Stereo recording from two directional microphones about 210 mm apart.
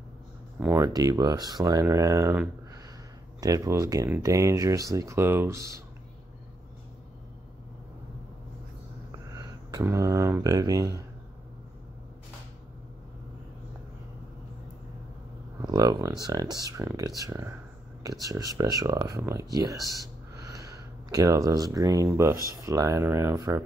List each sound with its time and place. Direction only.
0.6 s speech: 10° right (ahead or behind)
9.3 s speech: 20° right (ahead or behind)
15.6 s speech: 15° right (ahead or behind)